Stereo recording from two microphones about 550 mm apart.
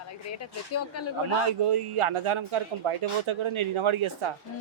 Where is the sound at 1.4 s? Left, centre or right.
Right.